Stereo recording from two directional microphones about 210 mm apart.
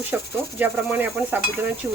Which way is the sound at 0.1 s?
5° right (ahead or behind).